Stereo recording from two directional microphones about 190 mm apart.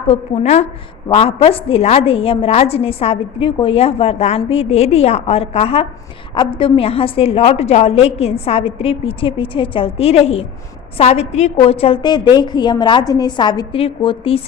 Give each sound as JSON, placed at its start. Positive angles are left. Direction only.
{"t": 0.1, "sound": "a woman's voice", "side_deg": 35}